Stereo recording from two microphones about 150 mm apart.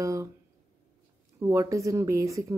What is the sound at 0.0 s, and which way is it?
Speech, 20° right (ahead or behind).